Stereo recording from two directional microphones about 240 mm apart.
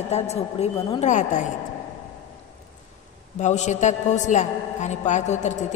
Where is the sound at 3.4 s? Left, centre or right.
Left.